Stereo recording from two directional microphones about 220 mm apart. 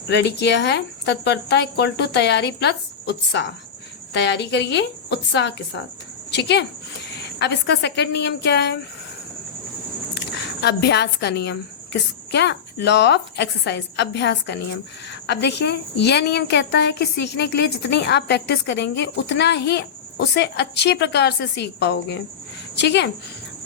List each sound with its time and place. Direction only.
0.1 s a woman's voice: 50° left (ahead or behind)
10.2 s a woman's voice: 50° left (ahead or behind)